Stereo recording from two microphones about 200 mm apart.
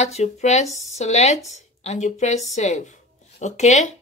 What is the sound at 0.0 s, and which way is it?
Speech, 35° left (ahead or behind).